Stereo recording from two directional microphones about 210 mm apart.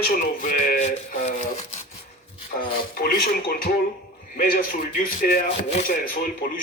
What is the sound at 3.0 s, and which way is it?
A man's voice, 45° left (ahead or behind).